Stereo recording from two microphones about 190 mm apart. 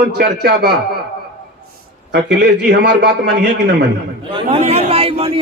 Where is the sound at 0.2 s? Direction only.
60° right (ahead or behind).